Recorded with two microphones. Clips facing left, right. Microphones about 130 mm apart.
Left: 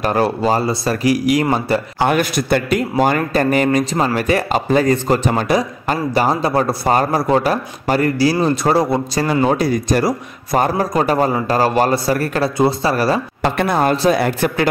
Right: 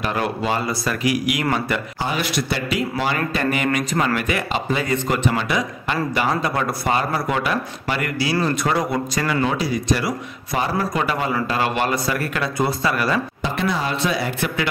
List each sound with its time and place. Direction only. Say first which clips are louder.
0.0 s speech: left 6 dB; 35° left (ahead or behind)
2.0 s a man's voice: left 9 dB; 55° left (ahead or behind); by 13.2 s 35° left (ahead or behind)
13.4 s speech: left 7 dB; 55° left (ahead or behind)